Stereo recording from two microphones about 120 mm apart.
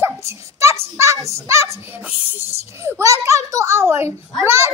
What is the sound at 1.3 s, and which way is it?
Speech, 25° right (ahead or behind).